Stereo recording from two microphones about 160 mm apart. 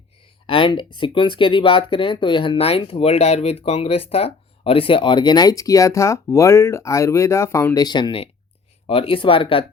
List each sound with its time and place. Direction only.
0.4 s speech: 30° left (ahead or behind)